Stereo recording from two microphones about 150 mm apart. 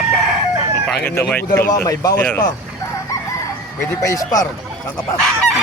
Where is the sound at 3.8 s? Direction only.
20° left (ahead or behind).